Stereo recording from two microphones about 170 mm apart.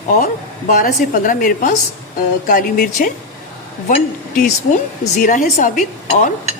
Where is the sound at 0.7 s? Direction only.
55° left (ahead or behind).